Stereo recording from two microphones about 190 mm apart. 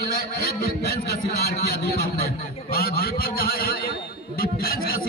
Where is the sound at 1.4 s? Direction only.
55° left (ahead or behind).